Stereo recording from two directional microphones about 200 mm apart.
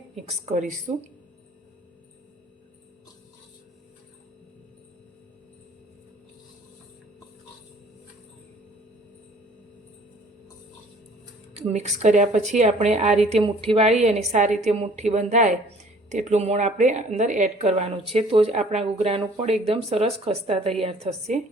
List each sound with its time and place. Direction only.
0.2 s speech: 35° right (ahead or behind)
11.5 s speech: 30° right (ahead or behind)